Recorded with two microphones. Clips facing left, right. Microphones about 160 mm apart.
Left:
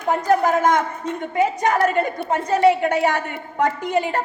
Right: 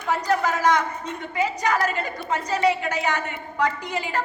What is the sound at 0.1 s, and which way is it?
A woman's voice, 50° left (ahead or behind).